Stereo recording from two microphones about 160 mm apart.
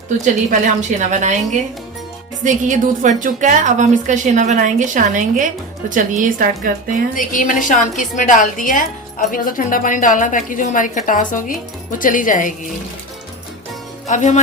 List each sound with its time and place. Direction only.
0.3 s a woman's voice: 50° right (ahead or behind)
2.4 s a woman's voice: 50° right (ahead or behind)
7.2 s a woman's voice: 55° left (ahead or behind)
14.1 s speech: 50° left (ahead or behind)